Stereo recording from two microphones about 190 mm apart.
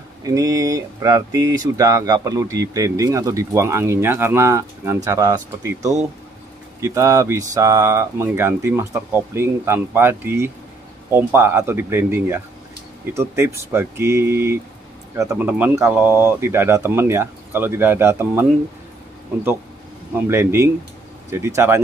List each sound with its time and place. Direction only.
0.2 s speech: 20° right (ahead or behind)
6.8 s speech: 15° right (ahead or behind)
20.2 s speech: 15° right (ahead or behind)